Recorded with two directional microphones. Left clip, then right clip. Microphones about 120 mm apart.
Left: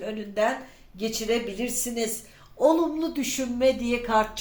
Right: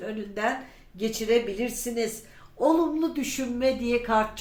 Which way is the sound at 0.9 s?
20° left (ahead or behind).